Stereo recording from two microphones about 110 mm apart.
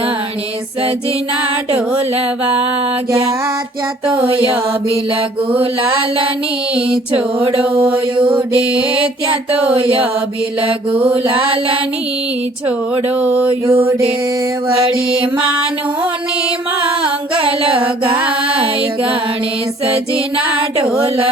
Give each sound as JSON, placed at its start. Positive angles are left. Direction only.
{"t": 4.1, "sound": "music", "side_deg": -55}
{"t": 5.5, "sound": "mantra", "side_deg": -50}
{"t": 8.1, "sound": "mantra", "side_deg": -50}
{"t": 9.0, "sound": "music", "side_deg": -55}
{"t": 13.1, "sound": "music", "side_deg": -15}
{"t": 13.5, "sound": "mantra", "side_deg": -55}
{"t": 17.3, "sound": "music", "side_deg": -55}
{"t": 18.2, "sound": "music", "side_deg": -10}